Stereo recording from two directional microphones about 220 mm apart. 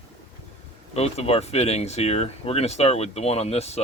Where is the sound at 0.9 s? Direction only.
30° left (ahead or behind).